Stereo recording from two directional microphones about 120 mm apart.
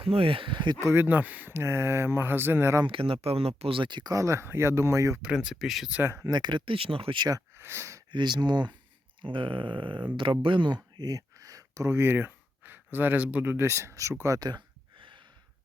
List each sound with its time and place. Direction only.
0.0 s a sound: 50° right (ahead or behind)
0.8 s speech: 20° right (ahead or behind)
2.8 s speech: 45° right (ahead or behind); by 5.2 s 25° right (ahead or behind)
5.2 s speech: 5° right (ahead or behind)
5.9 s speech: 15° right (ahead or behind)
6.2 s speech: 35° right (ahead or behind)
8.1 s speech: 40° right (ahead or behind)
9.2 s a sound: 45° right (ahead or behind)
10.9 s a sound: 30° right (ahead or behind)